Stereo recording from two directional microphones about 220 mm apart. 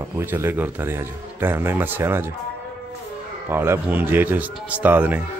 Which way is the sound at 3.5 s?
10° right (ahead or behind).